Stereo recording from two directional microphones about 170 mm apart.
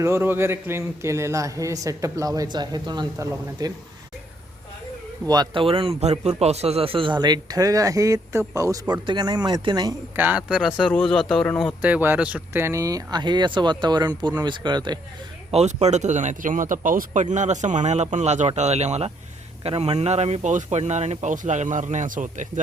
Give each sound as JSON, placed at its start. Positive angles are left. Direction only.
{"t": 0.0, "sound": "a man's voice", "side_deg": -15}
{"t": 5.2, "sound": "a man's voice", "side_deg": -25}
{"t": 10.2, "sound": "speech", "side_deg": -10}
{"t": 11.8, "sound": "a man's voice", "side_deg": -10}
{"t": 15.5, "sound": "speech", "side_deg": -40}